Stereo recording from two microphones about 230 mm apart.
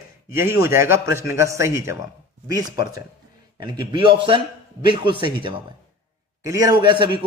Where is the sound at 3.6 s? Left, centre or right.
Centre.